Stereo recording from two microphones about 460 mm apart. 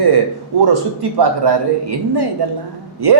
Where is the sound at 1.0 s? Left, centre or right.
Right.